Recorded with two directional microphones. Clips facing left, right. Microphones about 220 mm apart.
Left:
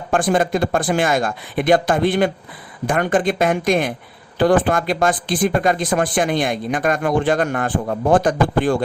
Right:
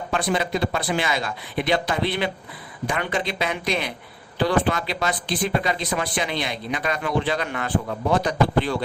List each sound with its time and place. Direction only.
0.1 s speech: 50° left (ahead or behind)